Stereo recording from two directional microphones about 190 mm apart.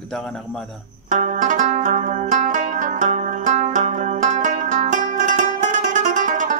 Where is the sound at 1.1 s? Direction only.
40° right (ahead or behind).